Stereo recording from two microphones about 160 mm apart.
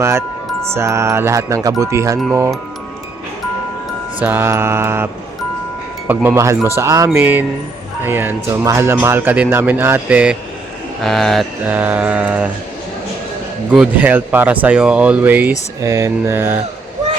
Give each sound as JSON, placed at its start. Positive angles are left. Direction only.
{"t": 0.0, "sound": "speech", "side_deg": -15}
{"t": 4.2, "sound": "speech", "side_deg": -15}
{"t": 6.1, "sound": "speech", "side_deg": -15}
{"t": 11.6, "sound": "speech", "side_deg": -10}
{"t": 13.7, "sound": "speech", "side_deg": -5}